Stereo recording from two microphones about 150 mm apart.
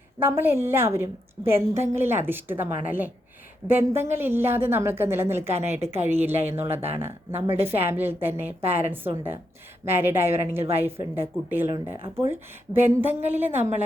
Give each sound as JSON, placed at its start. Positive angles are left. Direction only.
{"t": 0.2, "sound": "a woman's voice", "side_deg": -15}